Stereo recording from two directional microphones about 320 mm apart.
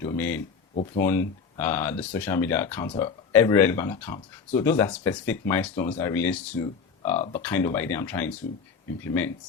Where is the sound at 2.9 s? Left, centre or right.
Centre.